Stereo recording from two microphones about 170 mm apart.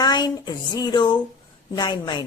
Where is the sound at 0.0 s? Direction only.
25° left (ahead or behind).